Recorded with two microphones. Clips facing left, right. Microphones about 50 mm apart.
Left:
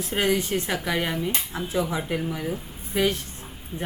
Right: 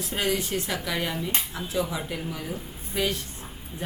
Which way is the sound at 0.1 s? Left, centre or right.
Left.